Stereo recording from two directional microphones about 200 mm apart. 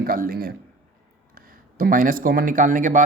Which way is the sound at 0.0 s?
50° right (ahead or behind).